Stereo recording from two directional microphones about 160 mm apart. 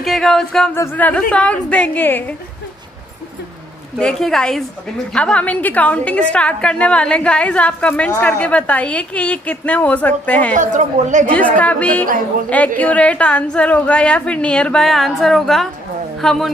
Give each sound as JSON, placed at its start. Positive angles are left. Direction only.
{"t": 0.0, "sound": "music", "side_deg": 0}
{"t": 0.7, "sound": "a woman's voice", "side_deg": 10}
{"t": 4.0, "sound": "music", "side_deg": 5}
{"t": 5.1, "sound": "a woman's voice", "side_deg": 5}
{"t": 10.5, "sound": "a woman's voice", "side_deg": -50}
{"t": 11.3, "sound": "a woman's voice", "side_deg": 10}
{"t": 16.2, "sound": "music", "side_deg": 0}